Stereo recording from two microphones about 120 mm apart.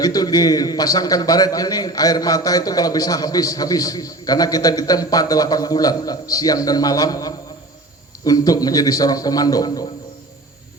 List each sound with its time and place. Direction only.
0.0 s a man's voice: 35° left (ahead or behind)